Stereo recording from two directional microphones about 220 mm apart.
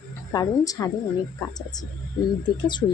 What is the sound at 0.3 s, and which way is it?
Speech, 15° left (ahead or behind).